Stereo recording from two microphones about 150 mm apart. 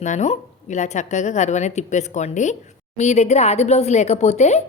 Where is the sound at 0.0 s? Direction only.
50° left (ahead or behind).